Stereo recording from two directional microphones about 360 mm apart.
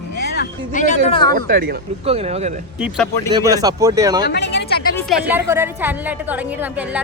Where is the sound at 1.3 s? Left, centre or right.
Right.